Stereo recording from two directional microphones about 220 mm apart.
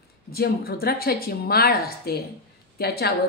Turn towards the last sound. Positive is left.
turn(degrees=45)  # may be behind; listen again after turning